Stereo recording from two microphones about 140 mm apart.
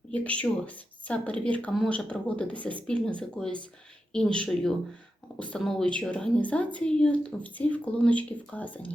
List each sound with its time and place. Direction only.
0.1 s a woman's voice: 10° left (ahead or behind)